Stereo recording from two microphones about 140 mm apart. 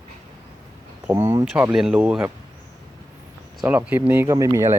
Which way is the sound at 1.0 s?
15° right (ahead or behind).